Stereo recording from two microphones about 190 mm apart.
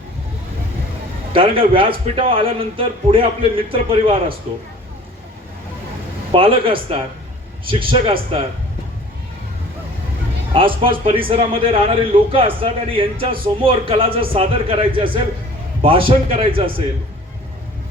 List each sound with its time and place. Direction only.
1.3 s a man's voice: 30° right (ahead or behind)
6.3 s a man's voice: 25° right (ahead or behind)
10.5 s a man's voice: 25° right (ahead or behind)